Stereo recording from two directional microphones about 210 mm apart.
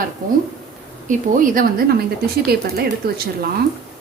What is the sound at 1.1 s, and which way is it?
A woman's voice, 40° right (ahead or behind).